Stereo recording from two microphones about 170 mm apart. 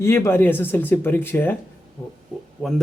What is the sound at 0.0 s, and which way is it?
Speech, 15° left (ahead or behind).